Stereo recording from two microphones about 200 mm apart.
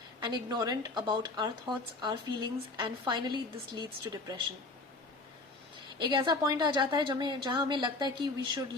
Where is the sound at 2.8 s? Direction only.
20° right (ahead or behind).